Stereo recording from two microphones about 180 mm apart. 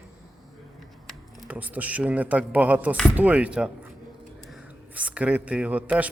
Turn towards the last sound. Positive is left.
turn(degrees=-5)  # may be behind; listen again after turning